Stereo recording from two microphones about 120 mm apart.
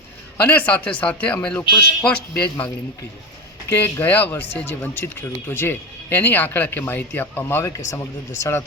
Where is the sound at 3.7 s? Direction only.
20° left (ahead or behind).